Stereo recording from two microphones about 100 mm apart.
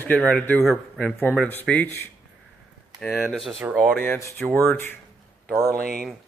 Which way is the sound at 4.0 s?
25° left (ahead or behind).